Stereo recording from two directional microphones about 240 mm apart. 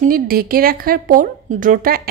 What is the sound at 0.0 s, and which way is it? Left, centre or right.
Speech, right.